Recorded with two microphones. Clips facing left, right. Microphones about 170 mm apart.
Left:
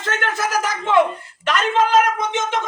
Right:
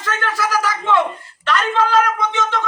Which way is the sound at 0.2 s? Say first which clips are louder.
Right 2 dB; 20° left (ahead or behind).